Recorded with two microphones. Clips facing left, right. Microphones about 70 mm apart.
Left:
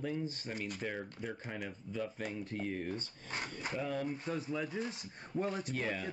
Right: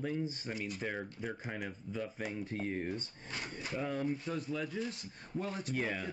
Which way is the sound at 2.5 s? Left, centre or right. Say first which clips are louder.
Right 1 dB; right.